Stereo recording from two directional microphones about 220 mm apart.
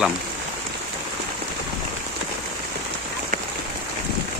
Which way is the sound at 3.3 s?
40° right (ahead or behind).